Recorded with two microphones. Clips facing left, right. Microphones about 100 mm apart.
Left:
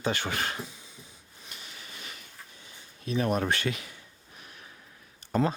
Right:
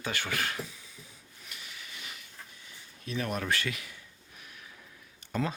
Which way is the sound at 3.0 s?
30° left (ahead or behind).